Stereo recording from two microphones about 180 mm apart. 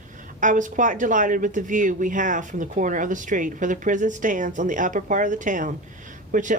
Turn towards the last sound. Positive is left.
turn(degrees=-45)  # may be behind; listen again after turning